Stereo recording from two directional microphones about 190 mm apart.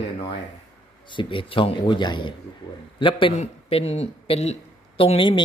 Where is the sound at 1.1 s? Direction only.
25° left (ahead or behind).